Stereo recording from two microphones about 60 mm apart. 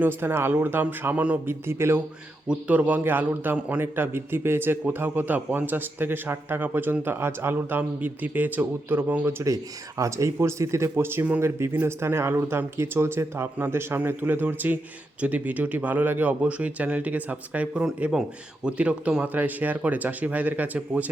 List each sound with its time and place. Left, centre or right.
0.0 s a man's voice: right
1.5 s speech: right
2.5 s a man's voice: right
10.0 s speech: right